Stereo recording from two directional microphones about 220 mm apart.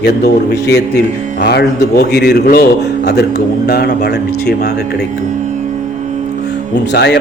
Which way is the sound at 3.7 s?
50° left (ahead or behind).